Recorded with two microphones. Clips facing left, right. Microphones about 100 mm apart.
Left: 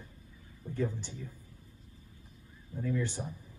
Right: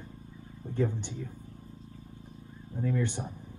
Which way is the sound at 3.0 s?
20° right (ahead or behind).